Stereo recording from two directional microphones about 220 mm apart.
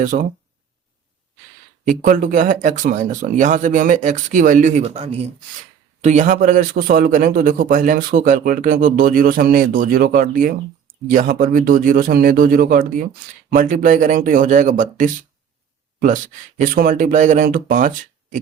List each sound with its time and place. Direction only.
0.1 s a man's voice: 40° right (ahead or behind)
1.8 s a man's voice: 35° right (ahead or behind)